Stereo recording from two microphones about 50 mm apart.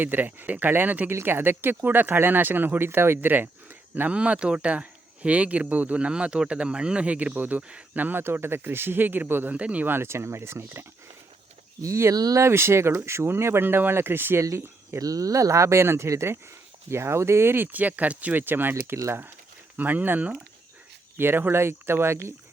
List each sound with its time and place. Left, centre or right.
0.0 s speech: right
4.1 s speech: right
8.2 s speech: right
9.6 s speech: right
9.8 s speech: right
11.8 s speech: right
14.9 s speech: right
16.9 s speech: right
18.4 s speech: right
19.7 s speech: right
21.2 s speech: right